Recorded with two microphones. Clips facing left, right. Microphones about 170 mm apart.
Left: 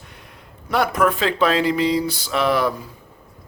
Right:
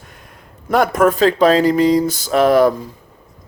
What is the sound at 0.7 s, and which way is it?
Speech, 45° right (ahead or behind).